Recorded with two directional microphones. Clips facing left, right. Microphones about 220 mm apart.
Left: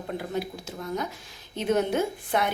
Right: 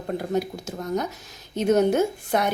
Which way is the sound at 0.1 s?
45° right (ahead or behind).